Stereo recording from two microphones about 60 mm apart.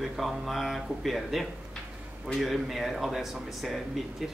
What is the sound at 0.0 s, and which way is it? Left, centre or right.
A man's voice, centre.